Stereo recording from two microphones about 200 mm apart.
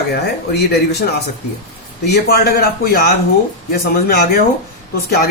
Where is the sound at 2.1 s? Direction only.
55° left (ahead or behind).